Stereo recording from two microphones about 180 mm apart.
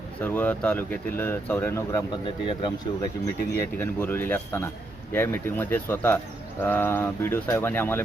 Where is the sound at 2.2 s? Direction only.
25° left (ahead or behind).